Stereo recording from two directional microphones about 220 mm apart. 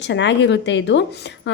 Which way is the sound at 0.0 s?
55° left (ahead or behind).